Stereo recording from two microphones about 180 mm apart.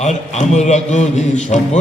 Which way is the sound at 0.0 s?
40° left (ahead or behind).